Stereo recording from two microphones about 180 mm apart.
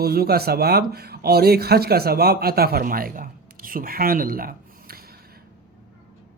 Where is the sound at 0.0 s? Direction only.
60° right (ahead or behind).